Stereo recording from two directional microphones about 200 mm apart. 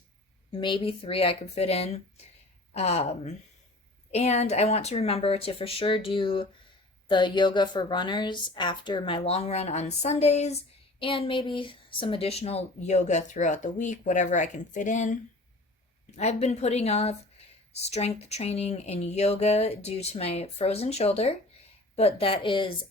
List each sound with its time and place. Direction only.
0.5 s a woman's voice: 25° left (ahead or behind)